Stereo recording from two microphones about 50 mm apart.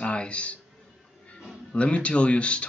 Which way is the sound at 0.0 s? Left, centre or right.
Left.